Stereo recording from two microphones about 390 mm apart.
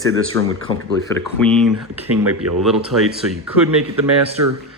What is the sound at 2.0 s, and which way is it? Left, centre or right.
Speech, right.